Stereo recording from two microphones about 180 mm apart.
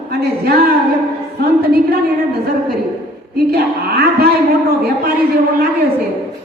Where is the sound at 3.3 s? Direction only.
60° right (ahead or behind).